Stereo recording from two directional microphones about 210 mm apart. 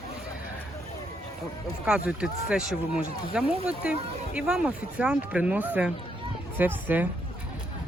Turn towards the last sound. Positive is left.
turn(degrees=-10)  # may be behind; listen again after turning